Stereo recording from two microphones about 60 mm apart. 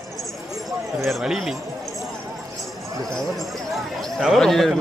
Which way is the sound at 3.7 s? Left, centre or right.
Centre.